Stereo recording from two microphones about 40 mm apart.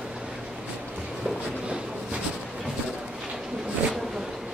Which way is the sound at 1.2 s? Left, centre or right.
Right.